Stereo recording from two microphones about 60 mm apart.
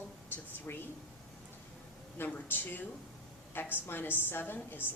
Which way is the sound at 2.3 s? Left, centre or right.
Left.